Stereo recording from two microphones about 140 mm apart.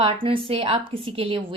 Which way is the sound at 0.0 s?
40° right (ahead or behind).